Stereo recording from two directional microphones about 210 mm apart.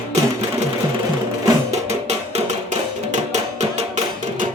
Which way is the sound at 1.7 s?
30° right (ahead or behind).